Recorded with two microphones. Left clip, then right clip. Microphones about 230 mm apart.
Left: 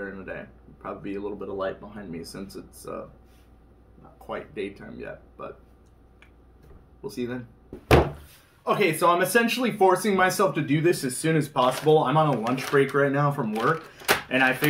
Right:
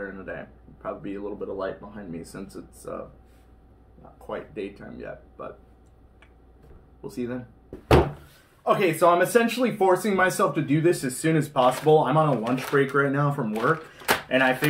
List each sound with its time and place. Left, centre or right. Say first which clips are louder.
0.0 s a sound: even; centre
0.8 s speech: even; centre
4.3 s speech: even; centre
8.6 s speech: right 2 dB; centre